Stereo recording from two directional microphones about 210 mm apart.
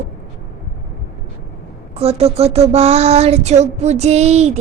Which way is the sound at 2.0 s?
30° right (ahead or behind).